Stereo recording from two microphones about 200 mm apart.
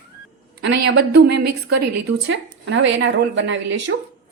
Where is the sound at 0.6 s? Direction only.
55° right (ahead or behind).